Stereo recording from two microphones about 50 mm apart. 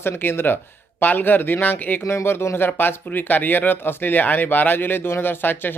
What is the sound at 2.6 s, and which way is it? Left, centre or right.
Speech, left.